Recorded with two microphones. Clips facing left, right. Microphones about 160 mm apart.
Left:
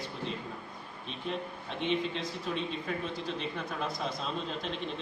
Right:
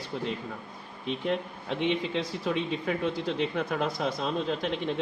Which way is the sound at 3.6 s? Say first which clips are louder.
Right 6 dB; 70° right (ahead or behind).